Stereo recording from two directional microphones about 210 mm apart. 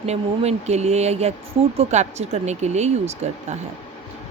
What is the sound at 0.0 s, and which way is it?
A woman's voice, 30° right (ahead or behind).